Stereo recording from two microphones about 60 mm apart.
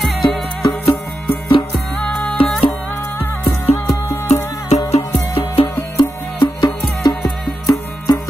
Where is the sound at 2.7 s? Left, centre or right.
Left.